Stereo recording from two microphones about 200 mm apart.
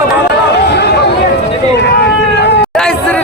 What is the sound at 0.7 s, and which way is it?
Chatter, 55° left (ahead or behind).